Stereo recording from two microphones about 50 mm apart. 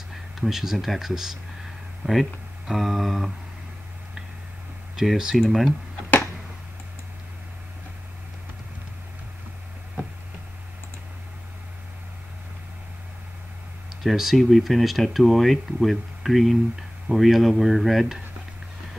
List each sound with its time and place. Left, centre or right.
0.1 s speech: centre
2.7 s speech: centre
4.9 s speech: centre
14.0 s speech: centre